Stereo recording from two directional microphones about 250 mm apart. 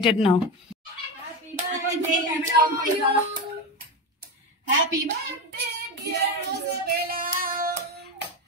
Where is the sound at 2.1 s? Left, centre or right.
Centre.